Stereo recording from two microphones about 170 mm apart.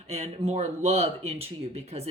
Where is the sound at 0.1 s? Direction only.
40° right (ahead or behind).